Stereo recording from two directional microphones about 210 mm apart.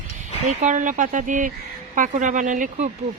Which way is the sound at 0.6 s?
35° right (ahead or behind).